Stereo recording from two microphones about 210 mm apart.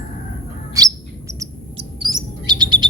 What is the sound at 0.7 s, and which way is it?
Chirp, 15° right (ahead or behind).